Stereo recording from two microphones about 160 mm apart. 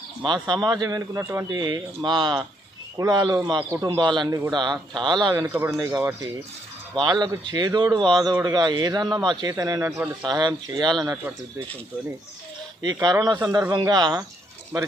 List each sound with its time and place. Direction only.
0.2 s speech: 30° right (ahead or behind)
10.2 s speech: 25° right (ahead or behind)
12.8 s speech: 25° right (ahead or behind)